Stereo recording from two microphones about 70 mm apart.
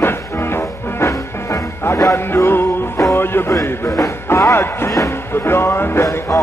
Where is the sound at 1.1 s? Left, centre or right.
Left.